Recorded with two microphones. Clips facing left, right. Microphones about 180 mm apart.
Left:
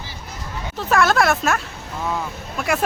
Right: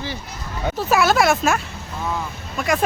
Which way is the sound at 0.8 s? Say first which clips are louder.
Even; 5° right (ahead or behind).